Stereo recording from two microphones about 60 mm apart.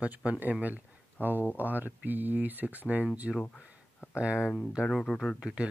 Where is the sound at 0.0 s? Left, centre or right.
Right.